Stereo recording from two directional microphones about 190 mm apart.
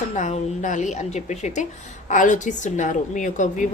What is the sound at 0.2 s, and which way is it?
A woman's voice, 40° left (ahead or behind).